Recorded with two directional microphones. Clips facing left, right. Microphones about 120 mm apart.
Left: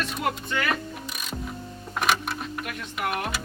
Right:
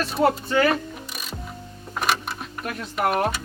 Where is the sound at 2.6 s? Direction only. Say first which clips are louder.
Right 9 dB; 40° right (ahead or behind).